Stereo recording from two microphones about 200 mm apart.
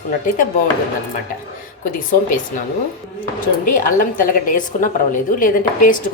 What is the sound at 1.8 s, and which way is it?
Speech, 40° left (ahead or behind).